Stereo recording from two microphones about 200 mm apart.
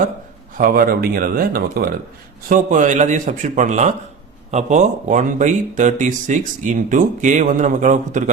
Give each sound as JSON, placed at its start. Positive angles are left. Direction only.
{"t": 0.5, "sound": "speech", "side_deg": -45}